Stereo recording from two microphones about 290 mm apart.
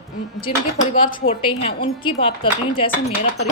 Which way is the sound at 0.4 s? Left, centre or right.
Left.